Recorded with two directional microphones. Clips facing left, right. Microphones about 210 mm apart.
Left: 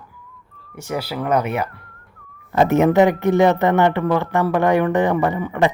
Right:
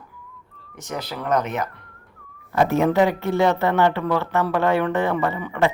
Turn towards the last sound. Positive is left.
turn(degrees=15)  # may be behind; listen again after turning